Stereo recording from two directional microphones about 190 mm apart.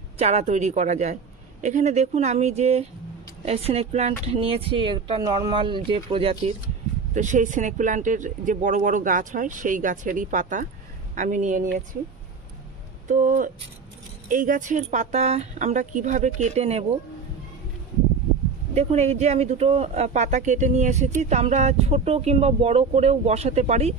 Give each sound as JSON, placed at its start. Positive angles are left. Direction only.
{"t": 0.2, "sound": "speech", "side_deg": -35}
{"t": 7.2, "sound": "speech", "side_deg": -40}
{"t": 13.1, "sound": "speech", "side_deg": -45}
{"t": 18.8, "sound": "speech", "side_deg": -35}